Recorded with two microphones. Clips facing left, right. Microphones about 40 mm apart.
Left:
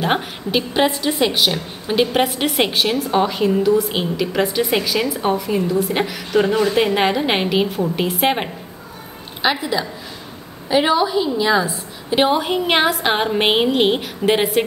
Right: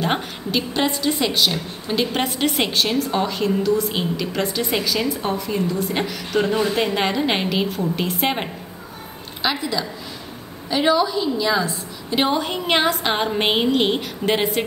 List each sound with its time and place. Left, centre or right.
0.0 s a woman's voice: centre
2.2 s a woman's voice: centre